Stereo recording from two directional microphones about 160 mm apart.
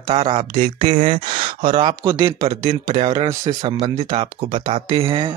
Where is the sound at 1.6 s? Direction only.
30° right (ahead or behind).